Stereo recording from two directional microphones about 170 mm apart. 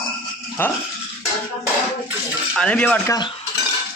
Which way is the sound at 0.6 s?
10° left (ahead or behind).